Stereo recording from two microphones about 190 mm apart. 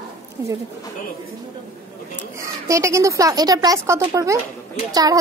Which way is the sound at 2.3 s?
15° right (ahead or behind).